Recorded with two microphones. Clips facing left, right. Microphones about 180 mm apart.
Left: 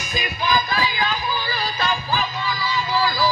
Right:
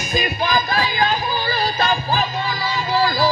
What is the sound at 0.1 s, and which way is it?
Music, 55° right (ahead or behind).